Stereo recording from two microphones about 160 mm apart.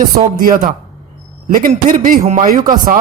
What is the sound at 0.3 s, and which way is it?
Speech, 60° right (ahead or behind).